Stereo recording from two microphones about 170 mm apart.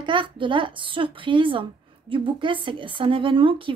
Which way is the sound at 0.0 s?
30° right (ahead or behind).